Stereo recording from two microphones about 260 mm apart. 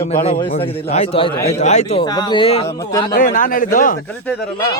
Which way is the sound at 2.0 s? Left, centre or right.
Centre.